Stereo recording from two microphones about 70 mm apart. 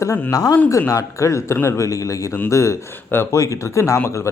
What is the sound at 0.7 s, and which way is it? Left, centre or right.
A man's voice, left.